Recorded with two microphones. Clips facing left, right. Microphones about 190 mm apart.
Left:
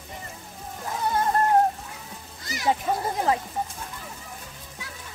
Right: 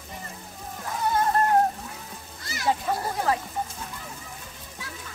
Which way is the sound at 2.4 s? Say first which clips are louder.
Left 1 dB; 20° left (ahead or behind).